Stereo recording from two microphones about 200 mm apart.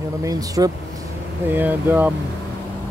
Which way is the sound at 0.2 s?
20° right (ahead or behind).